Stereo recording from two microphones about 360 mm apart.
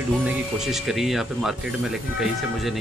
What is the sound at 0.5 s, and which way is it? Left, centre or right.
Speech, centre.